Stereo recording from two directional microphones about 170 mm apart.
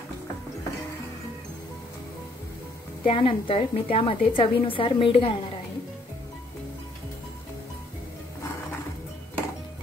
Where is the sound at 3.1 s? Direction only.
35° left (ahead or behind).